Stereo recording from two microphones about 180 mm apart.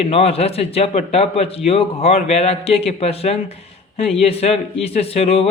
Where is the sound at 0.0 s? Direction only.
35° left (ahead or behind).